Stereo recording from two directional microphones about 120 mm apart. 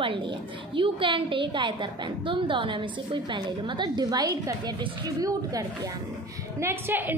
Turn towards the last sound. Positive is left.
turn(degrees=-15)  # may be behind; listen again after turning